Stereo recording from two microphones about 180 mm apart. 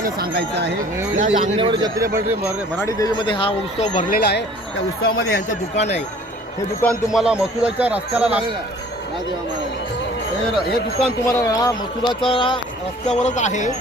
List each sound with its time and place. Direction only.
0.0 s speech: 60° right (ahead or behind)
1.2 s speech: 45° right (ahead or behind)
1.5 s speech: 25° right (ahead or behind)
2.1 s speech: 15° right (ahead or behind)
2.7 s speech: 20° left (ahead or behind); by 4.0 s 35° left (ahead or behind)
4.1 s speech: 60° left (ahead or behind)
6.8 s a man's voice: centre (ahead or behind)
11.3 s speech: 20° left (ahead or behind)
13.1 s speech: 40° left (ahead or behind)